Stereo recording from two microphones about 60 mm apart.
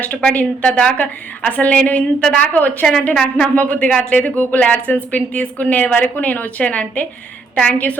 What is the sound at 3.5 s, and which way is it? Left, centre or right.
A woman's voice, left.